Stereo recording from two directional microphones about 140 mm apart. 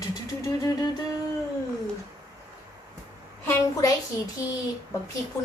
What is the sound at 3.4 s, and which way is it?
Speech, 20° left (ahead or behind).